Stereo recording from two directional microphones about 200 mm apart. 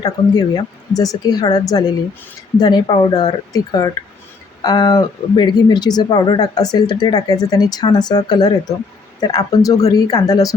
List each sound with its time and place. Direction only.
0.0 s speech: 20° left (ahead or behind)